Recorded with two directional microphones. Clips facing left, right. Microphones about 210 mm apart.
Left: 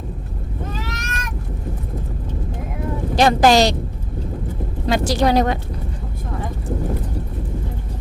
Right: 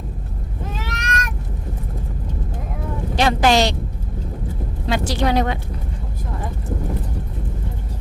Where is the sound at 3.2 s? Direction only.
40° left (ahead or behind).